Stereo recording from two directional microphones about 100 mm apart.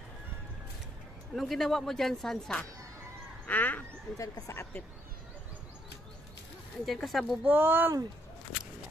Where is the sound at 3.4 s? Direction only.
15° left (ahead or behind).